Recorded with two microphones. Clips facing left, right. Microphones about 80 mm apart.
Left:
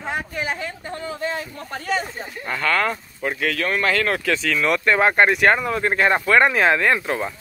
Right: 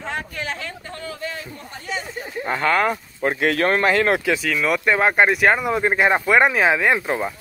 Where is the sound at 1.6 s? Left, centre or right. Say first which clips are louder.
Left 6 dB; left.